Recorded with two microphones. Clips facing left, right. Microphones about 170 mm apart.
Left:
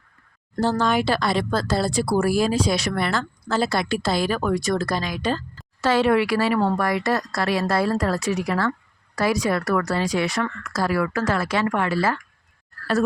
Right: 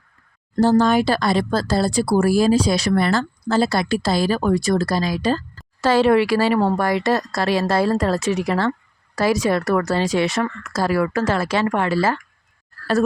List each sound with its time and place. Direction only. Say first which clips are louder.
0.6 s speech: right 6 dB; 40° right (ahead or behind)